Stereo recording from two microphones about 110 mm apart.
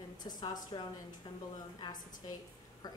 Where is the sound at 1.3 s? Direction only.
50° left (ahead or behind).